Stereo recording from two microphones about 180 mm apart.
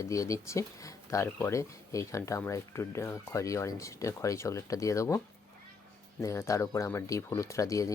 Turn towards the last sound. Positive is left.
turn(degrees=20)  # may be behind; listen again after turning